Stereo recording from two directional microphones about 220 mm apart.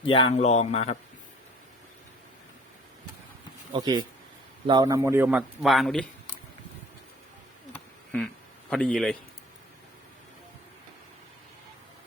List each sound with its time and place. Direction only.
0.0 s a man's voice: 25° left (ahead or behind)
3.7 s speech: 20° right (ahead or behind); by 6.4 s 5° left (ahead or behind)
8.7 s a man's voice: 5° left (ahead or behind)